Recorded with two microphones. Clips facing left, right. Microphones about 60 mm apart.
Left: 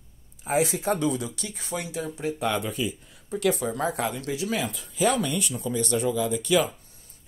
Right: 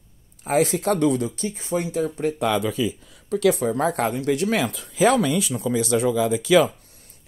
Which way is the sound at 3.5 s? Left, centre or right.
Right.